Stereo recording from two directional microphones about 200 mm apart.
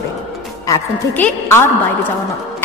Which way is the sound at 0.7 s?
10° left (ahead or behind).